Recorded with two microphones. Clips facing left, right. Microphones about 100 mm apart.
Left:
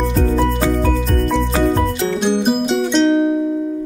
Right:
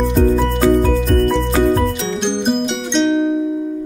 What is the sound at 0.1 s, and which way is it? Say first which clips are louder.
Music: right 2 dB; 35° right (ahead or behind).